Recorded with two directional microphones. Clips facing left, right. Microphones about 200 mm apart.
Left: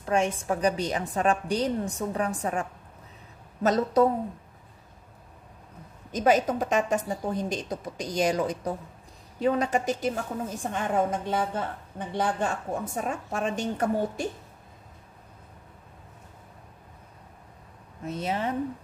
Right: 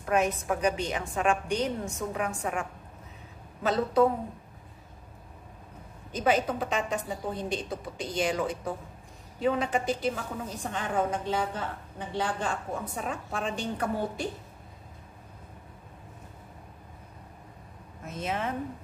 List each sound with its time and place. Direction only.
0.0 s a woman's voice: 30° left (ahead or behind)
3.6 s a woman's voice: 40° left (ahead or behind)
6.1 s a woman's voice: 45° left (ahead or behind)
18.0 s a woman's voice: 35° left (ahead or behind)